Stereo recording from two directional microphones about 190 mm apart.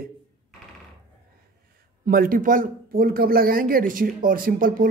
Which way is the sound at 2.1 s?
50° right (ahead or behind).